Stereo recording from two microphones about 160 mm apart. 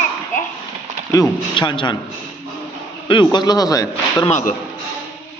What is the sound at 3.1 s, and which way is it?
Speech, 30° left (ahead or behind).